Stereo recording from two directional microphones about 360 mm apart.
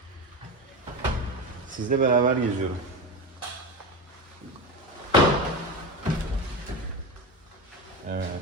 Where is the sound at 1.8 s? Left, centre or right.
Right.